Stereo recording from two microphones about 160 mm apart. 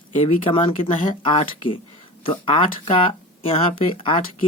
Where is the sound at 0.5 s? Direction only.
35° left (ahead or behind).